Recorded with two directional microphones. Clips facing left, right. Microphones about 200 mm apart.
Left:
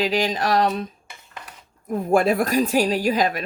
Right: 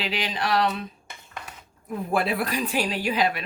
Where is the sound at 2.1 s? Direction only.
45° left (ahead or behind).